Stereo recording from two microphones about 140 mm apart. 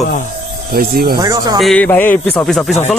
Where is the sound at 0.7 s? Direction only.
90° right.